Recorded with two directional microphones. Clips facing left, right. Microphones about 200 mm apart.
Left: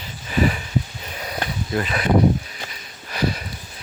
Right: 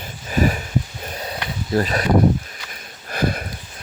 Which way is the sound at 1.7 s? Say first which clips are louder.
Right 5 dB; 40° right (ahead or behind).